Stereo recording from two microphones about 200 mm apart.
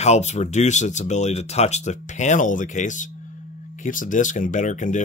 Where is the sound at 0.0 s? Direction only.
35° left (ahead or behind).